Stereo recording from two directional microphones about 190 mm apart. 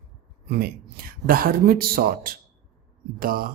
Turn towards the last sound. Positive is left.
turn(degrees=-50)  # may be behind; listen again after turning